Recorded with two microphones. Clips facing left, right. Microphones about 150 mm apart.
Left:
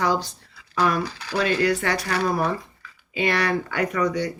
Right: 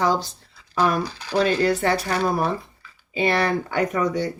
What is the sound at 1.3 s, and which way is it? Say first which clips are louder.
Speech: right 2 dB; 40° right (ahead or behind).